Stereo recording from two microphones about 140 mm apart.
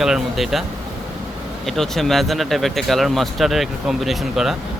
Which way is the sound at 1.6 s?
Centre (ahead or behind).